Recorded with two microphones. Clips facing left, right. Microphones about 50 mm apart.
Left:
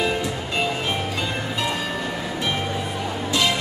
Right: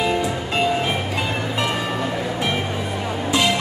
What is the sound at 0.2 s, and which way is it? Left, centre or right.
Music, centre.